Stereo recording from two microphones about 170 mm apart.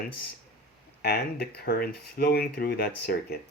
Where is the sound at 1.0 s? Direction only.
70° left (ahead or behind).